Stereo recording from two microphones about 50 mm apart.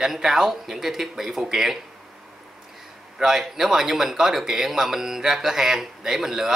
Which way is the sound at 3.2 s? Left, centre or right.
Centre.